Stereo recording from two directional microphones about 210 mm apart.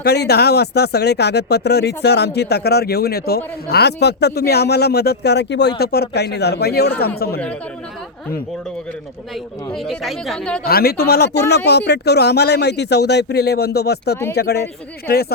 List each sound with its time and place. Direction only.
0.0 s speech: 50° left (ahead or behind)
9.3 s speech: centre (ahead or behind)
10.7 s speech: 45° left (ahead or behind)